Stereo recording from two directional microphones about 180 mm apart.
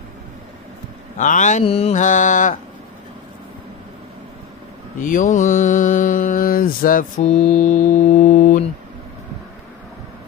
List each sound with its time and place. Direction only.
1.1 s mantra: 45° left (ahead or behind)
5.0 s mantra: 45° left (ahead or behind)